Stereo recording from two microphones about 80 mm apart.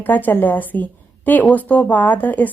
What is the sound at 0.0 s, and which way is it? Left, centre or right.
A woman's voice, left.